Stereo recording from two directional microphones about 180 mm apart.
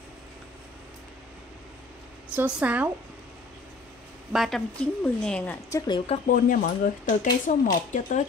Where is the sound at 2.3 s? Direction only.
5° right (ahead or behind).